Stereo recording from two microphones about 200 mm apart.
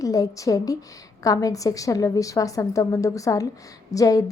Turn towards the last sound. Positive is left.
turn(degrees=15)  # may be behind; listen again after turning